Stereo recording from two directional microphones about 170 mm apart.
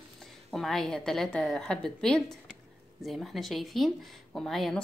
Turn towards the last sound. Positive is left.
turn(degrees=0)  # may be behind; listen again after turning